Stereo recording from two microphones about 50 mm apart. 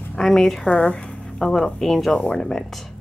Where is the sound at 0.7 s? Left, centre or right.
Left.